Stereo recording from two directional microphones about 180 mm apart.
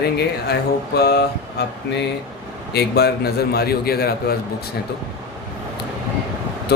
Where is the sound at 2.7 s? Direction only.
65° left (ahead or behind).